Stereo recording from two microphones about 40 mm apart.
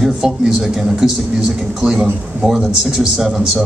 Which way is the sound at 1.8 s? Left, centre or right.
Centre.